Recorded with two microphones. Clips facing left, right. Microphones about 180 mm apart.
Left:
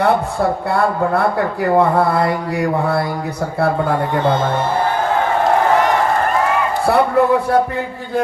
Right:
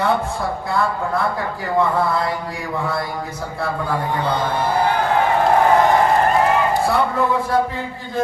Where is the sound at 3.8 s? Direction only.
50° left (ahead or behind).